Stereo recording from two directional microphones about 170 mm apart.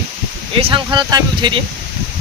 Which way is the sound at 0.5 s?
30° right (ahead or behind).